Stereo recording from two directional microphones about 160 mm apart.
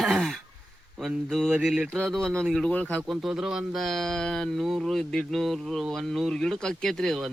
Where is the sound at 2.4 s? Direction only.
Centre (ahead or behind).